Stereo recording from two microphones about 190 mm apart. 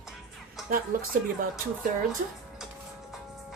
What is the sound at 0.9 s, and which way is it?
Speech, 45° right (ahead or behind).